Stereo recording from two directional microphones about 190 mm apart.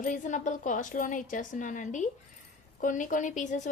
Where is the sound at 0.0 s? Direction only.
40° left (ahead or behind).